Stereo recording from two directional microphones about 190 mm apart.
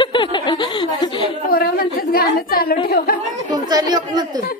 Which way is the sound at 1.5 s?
50° left (ahead or behind).